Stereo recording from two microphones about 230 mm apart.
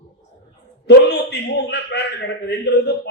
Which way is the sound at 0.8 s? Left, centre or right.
Left.